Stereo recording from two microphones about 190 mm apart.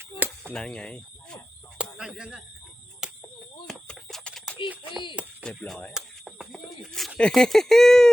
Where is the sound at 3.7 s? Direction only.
Centre (ahead or behind).